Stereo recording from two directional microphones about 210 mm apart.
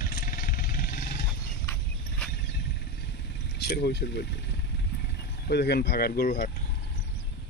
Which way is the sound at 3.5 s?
50° left (ahead or behind).